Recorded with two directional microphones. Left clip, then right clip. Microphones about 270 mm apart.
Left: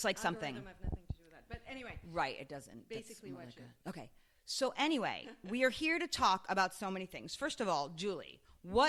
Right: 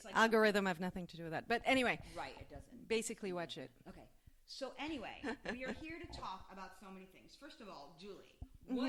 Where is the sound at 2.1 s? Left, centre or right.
Left.